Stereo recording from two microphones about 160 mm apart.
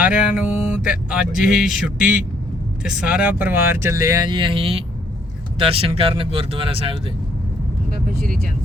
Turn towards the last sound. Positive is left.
turn(degrees=-35)  # may be behind; listen again after turning